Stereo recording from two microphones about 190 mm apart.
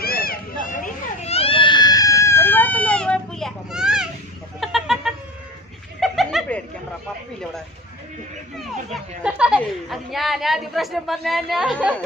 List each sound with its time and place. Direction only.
0.0 s children playing: 50° left (ahead or behind); by 4.1 s 5° right (ahead or behind)
4.6 s chicken: centre (ahead or behind)
5.9 s snicker: centre (ahead or behind)
8.5 s chatter: 5° right (ahead or behind)
9.6 s a sound: centre (ahead or behind)